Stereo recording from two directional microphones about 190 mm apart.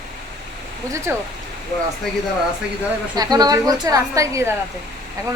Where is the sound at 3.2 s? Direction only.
20° right (ahead or behind).